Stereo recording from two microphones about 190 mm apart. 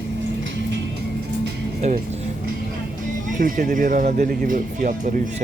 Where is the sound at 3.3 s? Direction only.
45° right (ahead or behind).